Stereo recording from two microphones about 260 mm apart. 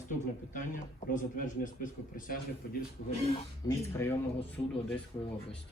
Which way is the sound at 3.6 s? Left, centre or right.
Centre.